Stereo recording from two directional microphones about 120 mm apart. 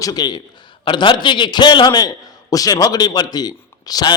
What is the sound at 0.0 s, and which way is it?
A man's voice, 35° left (ahead or behind).